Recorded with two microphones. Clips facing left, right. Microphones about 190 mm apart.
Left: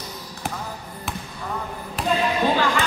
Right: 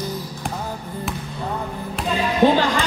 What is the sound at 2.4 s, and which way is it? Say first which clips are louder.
Music: right 9 dB; 20° right (ahead or behind).